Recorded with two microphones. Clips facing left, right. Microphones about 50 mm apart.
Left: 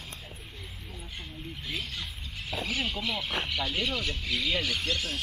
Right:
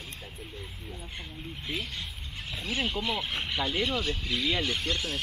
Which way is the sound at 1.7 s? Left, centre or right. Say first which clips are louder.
Right 1 dB; right.